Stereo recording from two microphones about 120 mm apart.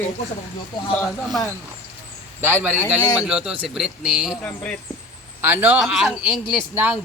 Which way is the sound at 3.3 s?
5° right (ahead or behind).